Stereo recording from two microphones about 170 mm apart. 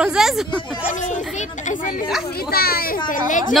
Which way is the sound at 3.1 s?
50° left (ahead or behind).